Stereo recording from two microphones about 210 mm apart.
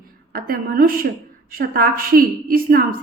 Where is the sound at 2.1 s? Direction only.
40° right (ahead or behind).